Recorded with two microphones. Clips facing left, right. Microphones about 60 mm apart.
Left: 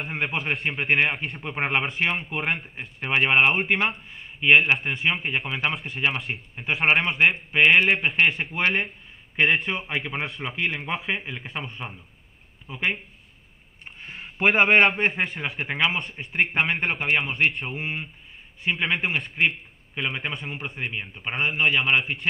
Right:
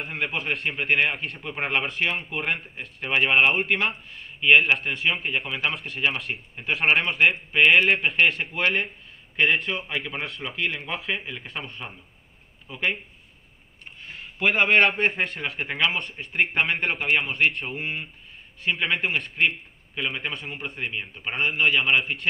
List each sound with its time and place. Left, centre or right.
0.4 s a man's voice: centre
1.1 s a man's voice: centre
1.4 s speech: centre
4.1 s a man's voice: centre
14.7 s a man's voice: centre